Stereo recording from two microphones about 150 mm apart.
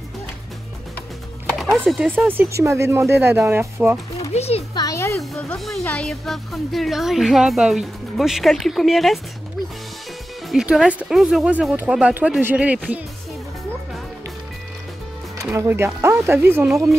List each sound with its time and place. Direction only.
1.6 s speech: centre (ahead or behind)
2.1 s speech: 15° right (ahead or behind)
4.2 s a child's voice: 45° left (ahead or behind)
4.7 s speech: 20° left (ahead or behind)
5.2 s speech: centre (ahead or behind)
10.5 s speech: 5° right (ahead or behind)
15.5 s speech: 15° right (ahead or behind)